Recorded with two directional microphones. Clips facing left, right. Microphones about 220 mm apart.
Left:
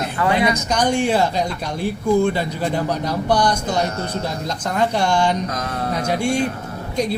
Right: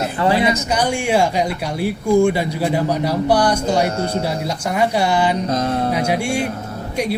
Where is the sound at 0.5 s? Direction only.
10° right (ahead or behind).